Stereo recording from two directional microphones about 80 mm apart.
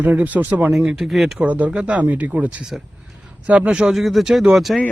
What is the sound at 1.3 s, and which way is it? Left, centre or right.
Speech, centre.